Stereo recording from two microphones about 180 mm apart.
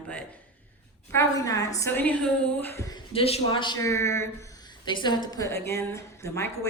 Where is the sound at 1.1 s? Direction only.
20° left (ahead or behind).